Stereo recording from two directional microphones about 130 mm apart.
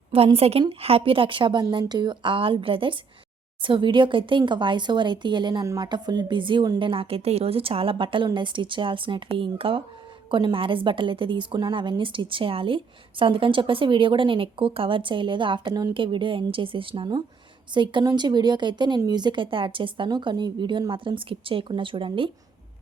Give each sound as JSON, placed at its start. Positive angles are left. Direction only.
{"t": 0.1, "sound": "a woman's voice", "side_deg": -45}